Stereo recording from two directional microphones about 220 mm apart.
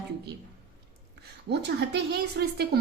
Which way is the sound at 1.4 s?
50° right (ahead or behind).